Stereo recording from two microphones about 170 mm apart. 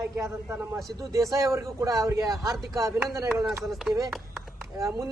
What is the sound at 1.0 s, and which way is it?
A man's voice, 20° right (ahead or behind).